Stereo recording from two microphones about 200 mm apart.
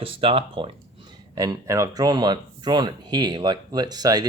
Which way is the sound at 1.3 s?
15° right (ahead or behind).